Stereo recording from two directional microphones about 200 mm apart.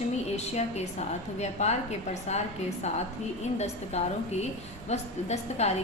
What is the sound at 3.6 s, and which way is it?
A woman's voice, 35° left (ahead or behind).